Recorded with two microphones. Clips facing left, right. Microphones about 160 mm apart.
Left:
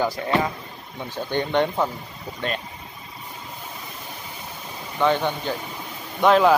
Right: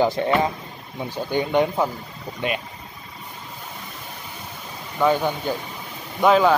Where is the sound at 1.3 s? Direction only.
10° right (ahead or behind).